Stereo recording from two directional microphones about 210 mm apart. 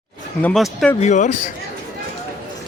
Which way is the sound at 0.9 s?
35° left (ahead or behind).